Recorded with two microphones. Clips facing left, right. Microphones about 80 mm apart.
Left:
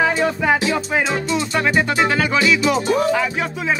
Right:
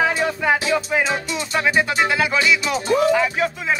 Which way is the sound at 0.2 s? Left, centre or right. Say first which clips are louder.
Left 2 dB; centre.